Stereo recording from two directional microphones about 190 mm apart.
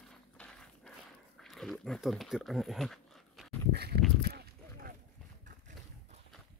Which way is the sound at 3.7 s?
55° right (ahead or behind).